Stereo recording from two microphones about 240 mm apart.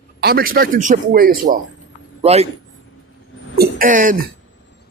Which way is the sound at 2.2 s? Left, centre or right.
Right.